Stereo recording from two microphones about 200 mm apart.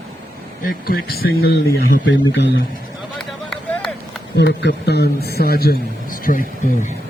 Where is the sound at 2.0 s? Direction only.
65° left (ahead or behind).